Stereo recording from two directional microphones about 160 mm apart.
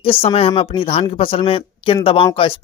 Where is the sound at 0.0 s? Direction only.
35° left (ahead or behind).